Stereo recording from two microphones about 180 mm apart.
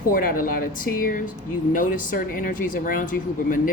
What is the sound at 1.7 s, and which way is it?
Speech, 50° left (ahead or behind).